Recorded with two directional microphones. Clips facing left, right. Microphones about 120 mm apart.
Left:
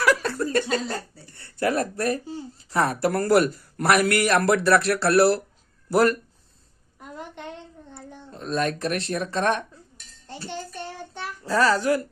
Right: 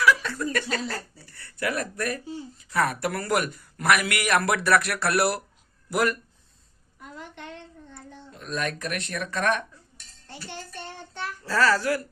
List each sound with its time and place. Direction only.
0.0 s speech: 40° left (ahead or behind)
7.9 s speech: 35° left (ahead or behind)
11.1 s a child's voice: 15° left (ahead or behind)